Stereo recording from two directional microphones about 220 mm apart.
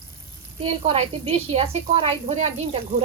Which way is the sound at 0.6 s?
25° right (ahead or behind).